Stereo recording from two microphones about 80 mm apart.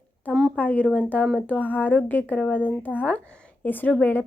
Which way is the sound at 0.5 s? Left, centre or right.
Centre.